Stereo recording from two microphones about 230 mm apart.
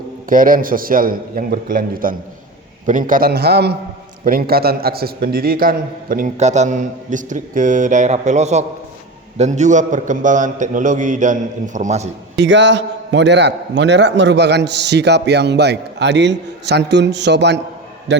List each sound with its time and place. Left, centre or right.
0.3 s a man's voice: right
12.4 s a man's voice: right